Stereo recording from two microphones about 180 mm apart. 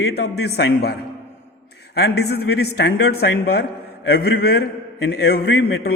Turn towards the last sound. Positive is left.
turn(degrees=65)  # may be behind; listen again after turning